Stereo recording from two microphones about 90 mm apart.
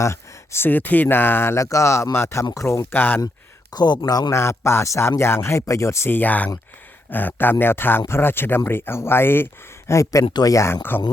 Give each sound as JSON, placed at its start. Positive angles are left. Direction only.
{"t": 0.0, "sound": "speech", "side_deg": 30}
{"t": 3.7, "sound": "speech", "side_deg": 50}
{"t": 4.4, "sound": "speech", "side_deg": 30}